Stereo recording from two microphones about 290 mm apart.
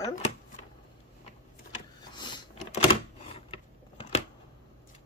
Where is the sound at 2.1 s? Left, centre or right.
Centre.